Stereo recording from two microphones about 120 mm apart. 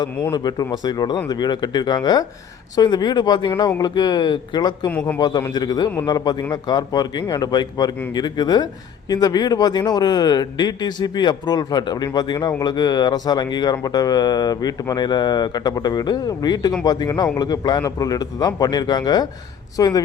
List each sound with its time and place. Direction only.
0.3 s speech: 35° left (ahead or behind)
4.9 s speech: 15° left (ahead or behind)
5.2 s speech: 35° left (ahead or behind)